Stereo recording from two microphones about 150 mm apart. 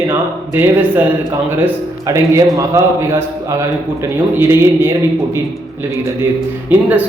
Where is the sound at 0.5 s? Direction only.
10° right (ahead or behind).